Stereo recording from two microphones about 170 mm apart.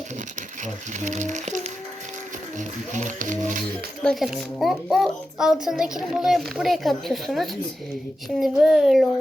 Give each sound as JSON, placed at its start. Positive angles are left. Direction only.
{"t": 0.6, "sound": "speech", "side_deg": -45}
{"t": 4.0, "sound": "a child's voice", "side_deg": 0}